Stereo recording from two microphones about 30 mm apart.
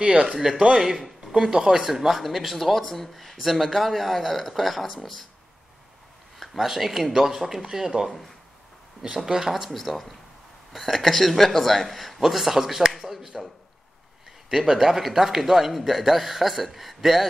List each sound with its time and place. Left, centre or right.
0.0 s speech: right
0.7 s a man's voice: centre
1.9 s speech: centre
6.4 s a man's voice: centre
9.7 s speech: centre
12.2 s a sound: centre
14.5 s a man's voice: centre